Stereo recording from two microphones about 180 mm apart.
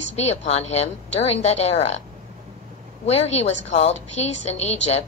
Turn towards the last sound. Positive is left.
turn(degrees=35)  # may be behind; listen again after turning